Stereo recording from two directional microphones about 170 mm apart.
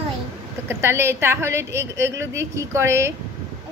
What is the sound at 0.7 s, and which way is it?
A woman's voice, 15° right (ahead or behind).